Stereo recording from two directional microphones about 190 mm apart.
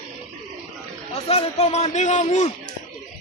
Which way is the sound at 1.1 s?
30° left (ahead or behind).